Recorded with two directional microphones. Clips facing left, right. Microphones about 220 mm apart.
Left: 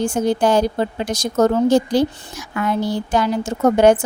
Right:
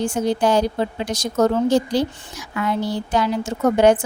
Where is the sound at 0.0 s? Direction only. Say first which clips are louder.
Left 2 dB; 45° left (ahead or behind).